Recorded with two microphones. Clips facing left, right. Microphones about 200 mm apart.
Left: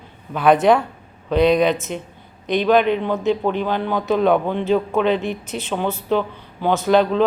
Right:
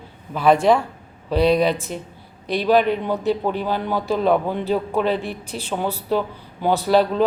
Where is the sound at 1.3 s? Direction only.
30° right (ahead or behind).